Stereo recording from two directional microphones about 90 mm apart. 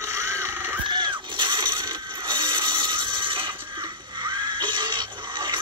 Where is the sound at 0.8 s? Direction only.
60° right (ahead or behind).